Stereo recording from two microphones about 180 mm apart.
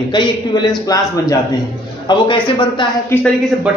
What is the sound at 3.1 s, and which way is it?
Speech, 15° left (ahead or behind).